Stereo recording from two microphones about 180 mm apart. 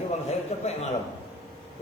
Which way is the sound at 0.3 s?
40° left (ahead or behind).